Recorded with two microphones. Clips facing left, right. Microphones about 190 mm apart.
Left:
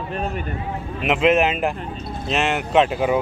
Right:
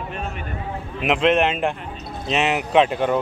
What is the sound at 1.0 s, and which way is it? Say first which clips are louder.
A man's voice: left 1 dB; 5° left (ahead or behind).